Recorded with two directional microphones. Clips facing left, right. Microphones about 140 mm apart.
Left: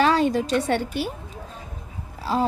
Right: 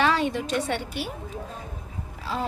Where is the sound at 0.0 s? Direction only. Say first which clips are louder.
Left 4 dB; 40° left (ahead or behind).